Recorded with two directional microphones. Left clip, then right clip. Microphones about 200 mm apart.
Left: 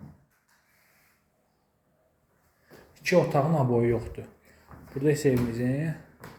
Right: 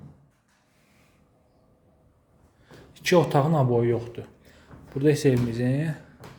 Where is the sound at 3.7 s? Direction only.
10° right (ahead or behind).